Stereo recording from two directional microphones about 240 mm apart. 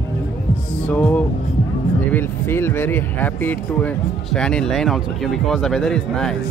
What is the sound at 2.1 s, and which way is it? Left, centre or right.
Speech, centre.